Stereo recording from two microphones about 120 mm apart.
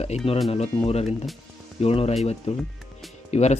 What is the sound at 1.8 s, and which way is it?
Speech, 55° left (ahead or behind).